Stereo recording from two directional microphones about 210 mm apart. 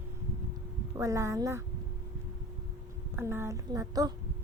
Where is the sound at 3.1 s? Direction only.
10° right (ahead or behind).